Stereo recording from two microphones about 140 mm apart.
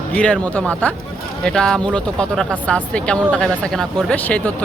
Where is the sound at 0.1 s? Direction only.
10° left (ahead or behind).